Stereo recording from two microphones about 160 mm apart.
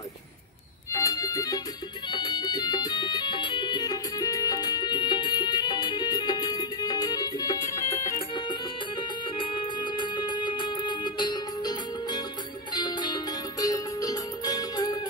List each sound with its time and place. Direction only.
0.9 s music: 20° left (ahead or behind)